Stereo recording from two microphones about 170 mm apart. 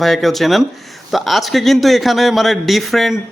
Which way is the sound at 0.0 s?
Centre (ahead or behind).